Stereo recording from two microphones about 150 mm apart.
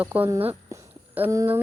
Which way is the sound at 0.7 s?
15° right (ahead or behind).